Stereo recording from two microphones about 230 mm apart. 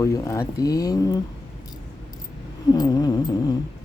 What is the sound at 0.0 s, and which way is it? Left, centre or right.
Speech, centre.